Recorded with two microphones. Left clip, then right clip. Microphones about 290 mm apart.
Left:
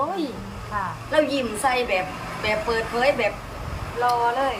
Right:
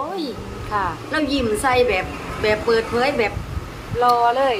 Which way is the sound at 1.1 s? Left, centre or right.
Centre.